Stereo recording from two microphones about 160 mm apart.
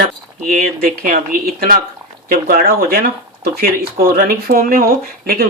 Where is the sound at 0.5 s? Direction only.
60° right (ahead or behind).